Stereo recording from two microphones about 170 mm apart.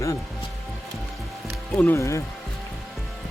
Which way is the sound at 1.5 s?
Centre (ahead or behind).